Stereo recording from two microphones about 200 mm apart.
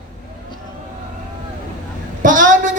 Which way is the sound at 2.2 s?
40° right (ahead or behind).